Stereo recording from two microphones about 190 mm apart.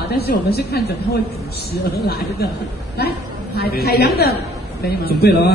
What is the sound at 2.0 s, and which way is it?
A man's voice, 55° left (ahead or behind).